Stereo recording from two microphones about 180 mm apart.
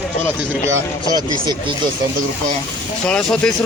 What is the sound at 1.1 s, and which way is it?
Speech, 25° right (ahead or behind).